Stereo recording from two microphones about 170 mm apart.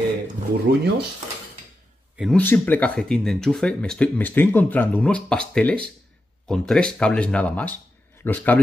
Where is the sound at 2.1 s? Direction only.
Centre (ahead or behind).